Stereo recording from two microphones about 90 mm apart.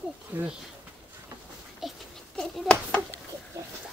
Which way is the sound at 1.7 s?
Centre (ahead or behind).